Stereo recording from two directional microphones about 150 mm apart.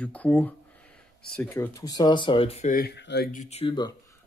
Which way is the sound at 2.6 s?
80° left.